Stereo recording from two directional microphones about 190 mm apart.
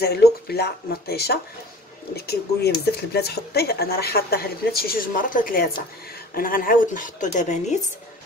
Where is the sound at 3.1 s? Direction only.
55° left (ahead or behind); by 7.8 s 40° left (ahead or behind).